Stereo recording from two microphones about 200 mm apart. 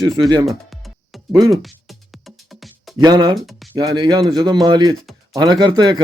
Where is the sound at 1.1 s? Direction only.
Centre (ahead or behind).